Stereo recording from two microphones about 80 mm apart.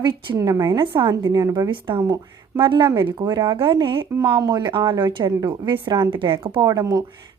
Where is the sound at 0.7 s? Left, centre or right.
Right.